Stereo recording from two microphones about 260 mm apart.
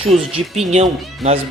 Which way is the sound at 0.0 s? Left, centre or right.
Right.